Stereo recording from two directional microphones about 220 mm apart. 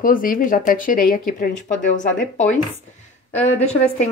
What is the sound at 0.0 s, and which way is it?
A woman's voice, 40° left (ahead or behind).